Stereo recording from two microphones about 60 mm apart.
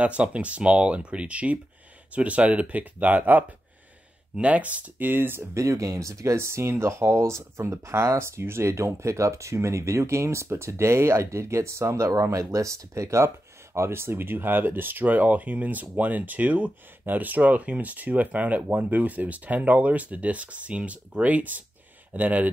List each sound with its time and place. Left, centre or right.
0.0 s speech: right
5.5 s speech: right
13.7 s speech: right